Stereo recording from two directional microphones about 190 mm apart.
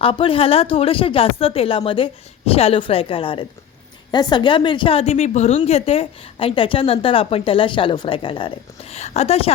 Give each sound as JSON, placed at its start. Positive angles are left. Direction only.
{"t": 0.0, "sound": "a woman's voice", "side_deg": 30}